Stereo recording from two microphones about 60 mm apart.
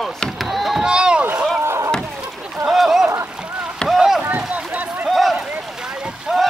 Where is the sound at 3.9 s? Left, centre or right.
Centre.